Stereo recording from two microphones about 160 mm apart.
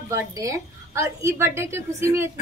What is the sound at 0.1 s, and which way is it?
A woman's voice, 20° right (ahead or behind).